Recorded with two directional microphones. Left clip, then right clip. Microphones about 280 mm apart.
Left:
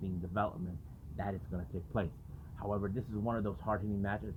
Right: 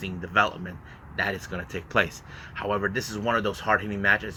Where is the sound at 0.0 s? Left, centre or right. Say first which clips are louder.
Right 13 dB; right.